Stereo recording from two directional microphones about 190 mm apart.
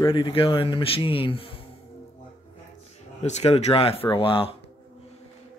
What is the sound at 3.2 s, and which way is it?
Speech, 35° left (ahead or behind).